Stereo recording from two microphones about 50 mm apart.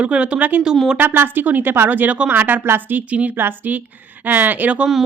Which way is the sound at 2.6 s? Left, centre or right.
Right.